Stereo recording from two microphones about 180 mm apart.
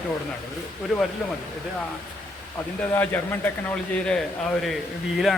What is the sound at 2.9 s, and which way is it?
A man's voice, 10° left (ahead or behind).